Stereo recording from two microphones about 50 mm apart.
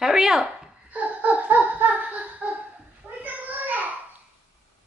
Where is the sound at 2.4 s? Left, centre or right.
Right.